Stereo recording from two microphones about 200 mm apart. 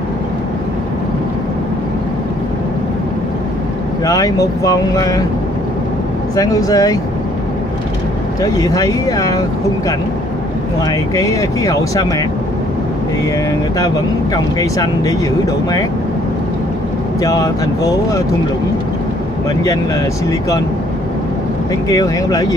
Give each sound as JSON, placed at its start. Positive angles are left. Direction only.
{"t": 4.0, "sound": "speech", "side_deg": 15}
{"t": 6.3, "sound": "speech", "side_deg": 15}
{"t": 8.4, "sound": "speech", "side_deg": 15}
{"t": 10.9, "sound": "speech", "side_deg": 15}
{"t": 13.7, "sound": "speech", "side_deg": 15}
{"t": 17.2, "sound": "speech", "side_deg": 15}
{"t": 20.2, "sound": "speech", "side_deg": 15}
{"t": 21.8, "sound": "speech", "side_deg": 15}